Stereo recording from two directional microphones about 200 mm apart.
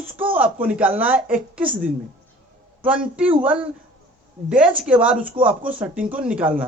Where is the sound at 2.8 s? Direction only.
5° right (ahead or behind).